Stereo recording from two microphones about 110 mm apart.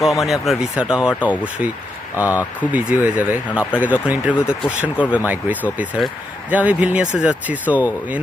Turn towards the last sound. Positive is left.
turn(degrees=-15)  # may be behind; listen again after turning